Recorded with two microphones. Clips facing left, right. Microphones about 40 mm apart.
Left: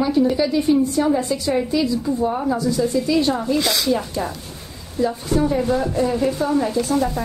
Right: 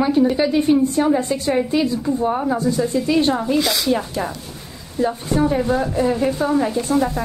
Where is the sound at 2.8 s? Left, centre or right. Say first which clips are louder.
Even; centre.